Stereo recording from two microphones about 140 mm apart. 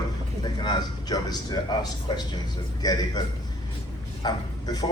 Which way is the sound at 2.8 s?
30° left (ahead or behind).